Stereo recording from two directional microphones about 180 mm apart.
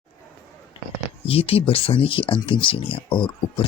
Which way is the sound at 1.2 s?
30° left (ahead or behind).